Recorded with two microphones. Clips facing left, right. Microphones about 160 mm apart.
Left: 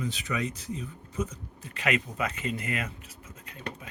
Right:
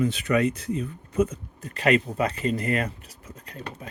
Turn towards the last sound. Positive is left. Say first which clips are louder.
# right 6 dB
turn(degrees=-35)  # may be behind; listen again after turning